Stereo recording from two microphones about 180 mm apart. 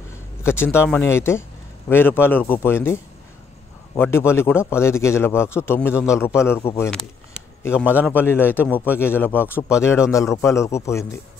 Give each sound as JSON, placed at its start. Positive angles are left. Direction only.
{"t": 0.4, "sound": "a man's voice", "side_deg": 15}
{"t": 7.7, "sound": "a man's voice", "side_deg": -10}
{"t": 8.1, "sound": "a man's voice", "side_deg": 10}